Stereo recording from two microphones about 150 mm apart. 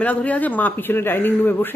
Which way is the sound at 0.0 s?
10° left (ahead or behind).